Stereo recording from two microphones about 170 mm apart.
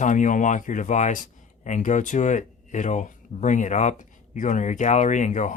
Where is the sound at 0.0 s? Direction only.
50° left (ahead or behind).